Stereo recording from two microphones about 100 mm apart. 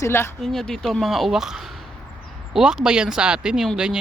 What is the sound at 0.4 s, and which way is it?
Speech, 5° left (ahead or behind).